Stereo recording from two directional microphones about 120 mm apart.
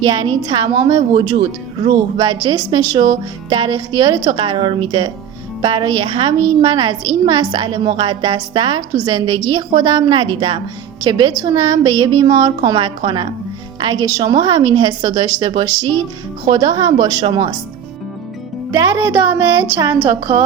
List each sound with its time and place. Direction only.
0.0 s a woman's voice: 40° right (ahead or behind)
2.1 s a woman's voice: 35° right (ahead or behind)
14.0 s a woman's voice: 30° right (ahead or behind)
18.7 s speech: 25° right (ahead or behind)